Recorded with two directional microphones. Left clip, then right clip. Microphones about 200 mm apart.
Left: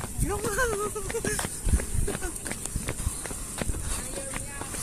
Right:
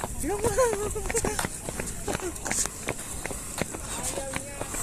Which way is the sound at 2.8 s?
45° right (ahead or behind).